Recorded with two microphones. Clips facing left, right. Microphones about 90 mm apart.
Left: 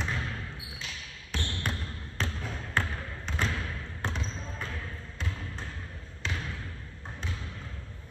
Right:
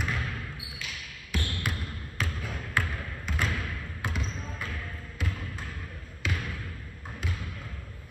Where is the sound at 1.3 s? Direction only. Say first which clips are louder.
Right 2 dB; 50° right (ahead or behind).